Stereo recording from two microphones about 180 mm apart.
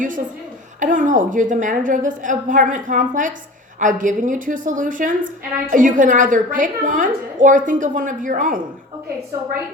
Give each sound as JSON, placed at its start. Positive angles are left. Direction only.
{"t": 0.8, "sound": "a woman's voice", "side_deg": -45}